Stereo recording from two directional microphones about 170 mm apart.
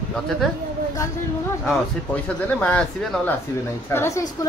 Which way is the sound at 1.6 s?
10° left (ahead or behind).